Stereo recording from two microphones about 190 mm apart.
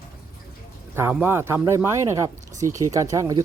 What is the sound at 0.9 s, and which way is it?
Speech, 10° right (ahead or behind).